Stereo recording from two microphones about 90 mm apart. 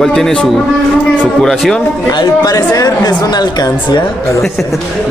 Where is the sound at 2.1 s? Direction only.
45° left (ahead or behind).